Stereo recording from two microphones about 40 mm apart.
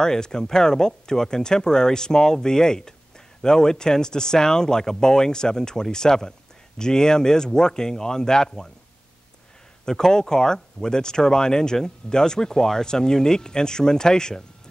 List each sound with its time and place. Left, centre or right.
0.0 s speech: centre
9.8 s speech: centre